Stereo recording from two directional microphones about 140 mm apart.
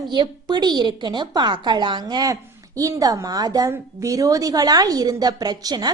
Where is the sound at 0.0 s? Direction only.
30° right (ahead or behind).